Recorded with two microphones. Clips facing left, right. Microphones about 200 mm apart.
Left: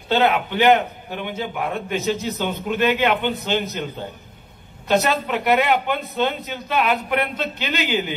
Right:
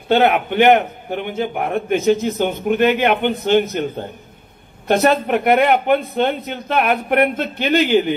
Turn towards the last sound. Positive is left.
turn(degrees=-55)  # may be behind; listen again after turning